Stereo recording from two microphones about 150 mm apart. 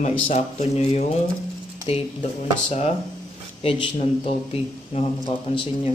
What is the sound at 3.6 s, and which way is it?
Speech, 40° left (ahead or behind).